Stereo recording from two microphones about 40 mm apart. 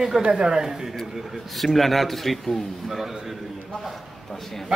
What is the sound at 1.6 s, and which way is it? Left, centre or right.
A man's voice, centre.